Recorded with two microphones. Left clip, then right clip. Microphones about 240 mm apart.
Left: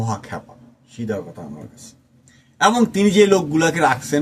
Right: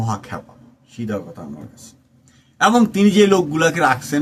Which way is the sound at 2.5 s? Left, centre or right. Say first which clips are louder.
Right 1 dB; centre.